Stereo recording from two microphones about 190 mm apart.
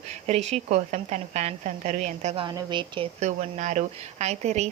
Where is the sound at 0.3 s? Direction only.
35° right (ahead or behind).